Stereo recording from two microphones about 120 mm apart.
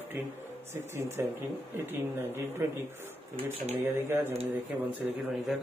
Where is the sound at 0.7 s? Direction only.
20° right (ahead or behind).